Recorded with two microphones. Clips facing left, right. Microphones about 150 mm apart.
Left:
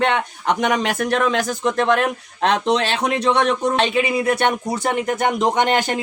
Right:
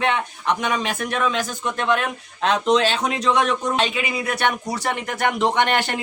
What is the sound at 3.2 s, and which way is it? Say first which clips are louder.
Speech: left 2 dB; 60° left (ahead or behind).